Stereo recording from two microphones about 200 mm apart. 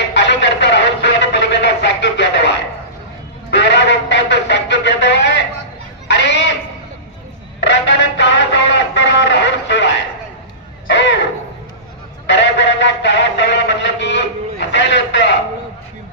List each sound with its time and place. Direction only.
0.1 s a sound: 60° left (ahead or behind)
7.6 s music: 60° left (ahead or behind)
10.8 s crow: 60° left (ahead or behind)
12.3 s music: 60° left (ahead or behind)